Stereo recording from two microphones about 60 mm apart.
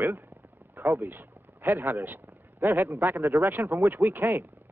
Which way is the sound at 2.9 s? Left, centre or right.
Right.